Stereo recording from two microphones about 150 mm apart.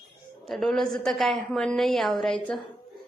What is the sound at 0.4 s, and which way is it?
A woman's voice, centre (ahead or behind).